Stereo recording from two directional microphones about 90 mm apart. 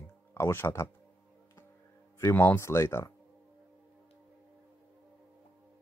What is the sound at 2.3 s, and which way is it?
Speech, 25° left (ahead or behind).